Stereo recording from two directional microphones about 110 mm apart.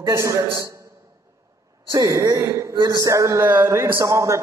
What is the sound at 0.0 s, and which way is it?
Speech, 30° right (ahead or behind).